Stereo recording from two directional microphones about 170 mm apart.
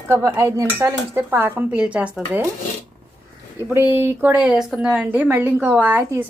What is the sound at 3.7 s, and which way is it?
A woman's voice, 10° right (ahead or behind).